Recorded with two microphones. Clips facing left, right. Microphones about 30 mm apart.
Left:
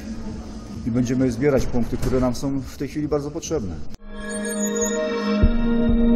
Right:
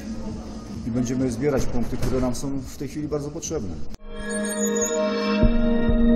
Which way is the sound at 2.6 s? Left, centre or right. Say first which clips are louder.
Left 4 dB; centre.